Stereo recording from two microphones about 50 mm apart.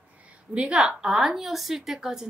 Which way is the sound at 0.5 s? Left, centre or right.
Centre.